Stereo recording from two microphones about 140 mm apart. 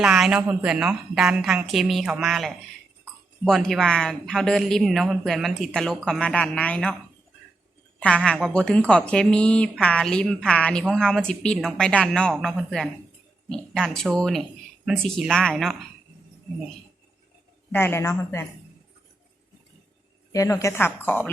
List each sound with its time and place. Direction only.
0.0 s a man's voice: 5° right (ahead or behind)
7.9 s speech: 10° left (ahead or behind)
17.7 s a woman's voice: 15° left (ahead or behind)
20.3 s a woman's voice: 20° left (ahead or behind)